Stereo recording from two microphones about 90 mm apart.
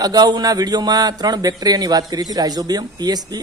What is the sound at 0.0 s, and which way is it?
Speech, 45° right (ahead or behind).